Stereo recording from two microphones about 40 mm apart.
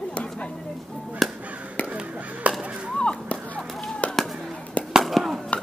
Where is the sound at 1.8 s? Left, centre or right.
Right.